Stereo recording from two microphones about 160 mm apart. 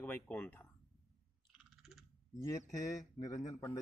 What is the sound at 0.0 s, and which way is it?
Speech, 10° left (ahead or behind).